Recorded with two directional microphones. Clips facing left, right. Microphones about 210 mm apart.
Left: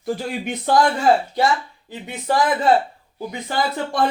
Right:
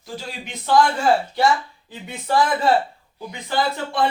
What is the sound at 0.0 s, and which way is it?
Speech, 55° left (ahead or behind).